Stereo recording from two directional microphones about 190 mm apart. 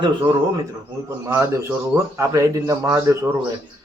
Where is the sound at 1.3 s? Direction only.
15° right (ahead or behind).